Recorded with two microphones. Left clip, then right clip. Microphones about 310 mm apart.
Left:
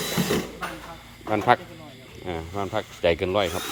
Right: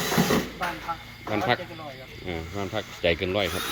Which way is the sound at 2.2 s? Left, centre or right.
Centre.